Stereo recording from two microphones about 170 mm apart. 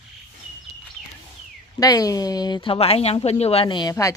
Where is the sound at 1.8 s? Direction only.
20° left (ahead or behind).